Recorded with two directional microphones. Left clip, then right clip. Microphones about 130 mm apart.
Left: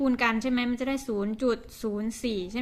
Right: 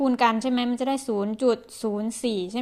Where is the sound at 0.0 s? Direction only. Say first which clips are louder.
Right 4 dB; 30° right (ahead or behind).